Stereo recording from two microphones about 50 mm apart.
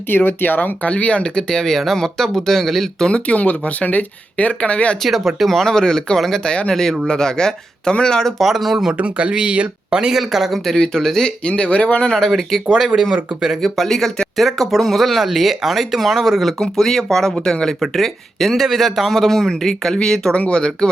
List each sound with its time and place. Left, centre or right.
0.1 s speech: left
0.9 s speech: left; by 3.1 s centre
3.1 s speech: left
5.0 s speech: centre
6.4 s speech: centre
8.4 s speech: centre
9.0 s speech: right
10.2 s speech: centre
10.8 s speech: centre
11.4 s speech: left
12.3 s speech: centre
12.9 s speech: right
13.6 s speech: centre
20.3 s speech: left